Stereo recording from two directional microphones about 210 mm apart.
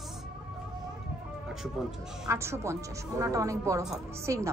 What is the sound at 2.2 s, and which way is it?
A woman's voice, 10° right (ahead or behind).